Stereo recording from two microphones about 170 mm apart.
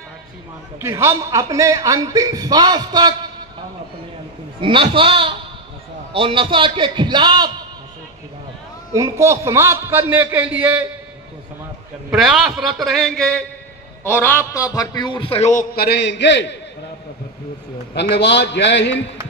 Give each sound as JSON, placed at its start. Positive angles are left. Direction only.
{"t": 0.7, "sound": "a man's voice", "side_deg": -15}
{"t": 4.6, "sound": "a man's voice", "side_deg": -30}
{"t": 8.9, "sound": "a man's voice", "side_deg": -15}
{"t": 12.1, "sound": "a man's voice", "side_deg": 0}
{"t": 14.0, "sound": "a man's voice", "side_deg": 15}
{"t": 15.5, "sound": "a man's voice", "side_deg": 65}
{"t": 17.9, "sound": "a man's voice", "side_deg": 80}